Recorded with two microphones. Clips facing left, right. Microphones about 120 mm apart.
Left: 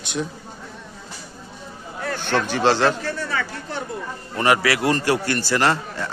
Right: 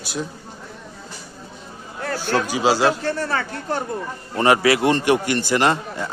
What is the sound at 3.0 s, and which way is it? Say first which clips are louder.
Speech: right 3 dB; 40° right (ahead or behind).